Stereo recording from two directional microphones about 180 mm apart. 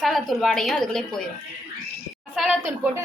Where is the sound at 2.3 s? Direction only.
Centre (ahead or behind).